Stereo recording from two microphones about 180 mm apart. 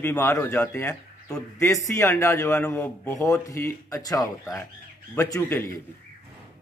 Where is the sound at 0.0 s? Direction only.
15° left (ahead or behind).